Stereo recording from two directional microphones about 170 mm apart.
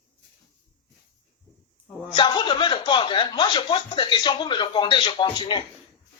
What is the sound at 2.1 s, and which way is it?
Speech, 25° left (ahead or behind).